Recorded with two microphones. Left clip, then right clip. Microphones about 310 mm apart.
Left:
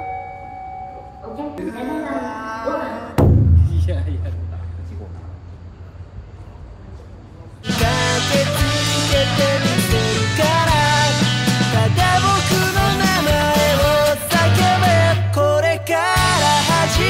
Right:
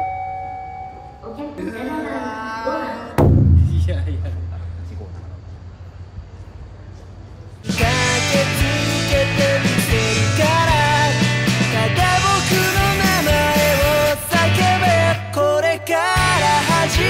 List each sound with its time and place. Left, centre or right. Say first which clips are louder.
1.5 s music: even; centre
7.6 s music: even; centre